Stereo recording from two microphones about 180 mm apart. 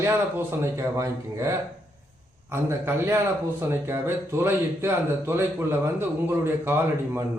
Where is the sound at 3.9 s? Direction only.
15° right (ahead or behind).